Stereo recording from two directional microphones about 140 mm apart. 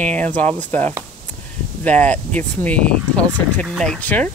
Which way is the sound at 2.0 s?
10° left (ahead or behind).